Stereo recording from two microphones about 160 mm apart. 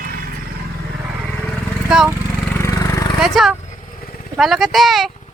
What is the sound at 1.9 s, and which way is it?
Speech, 5° right (ahead or behind).